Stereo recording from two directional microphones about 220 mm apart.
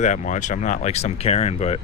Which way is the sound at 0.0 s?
35° left (ahead or behind).